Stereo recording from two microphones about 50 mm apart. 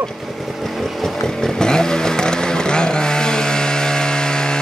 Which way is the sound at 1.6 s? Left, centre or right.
Centre.